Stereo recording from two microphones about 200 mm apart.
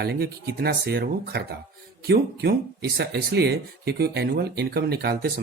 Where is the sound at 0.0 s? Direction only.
50° right (ahead or behind).